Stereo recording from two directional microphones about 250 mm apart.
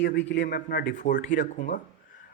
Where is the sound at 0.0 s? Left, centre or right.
Left.